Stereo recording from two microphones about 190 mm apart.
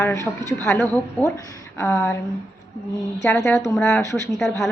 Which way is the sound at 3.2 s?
15° left (ahead or behind).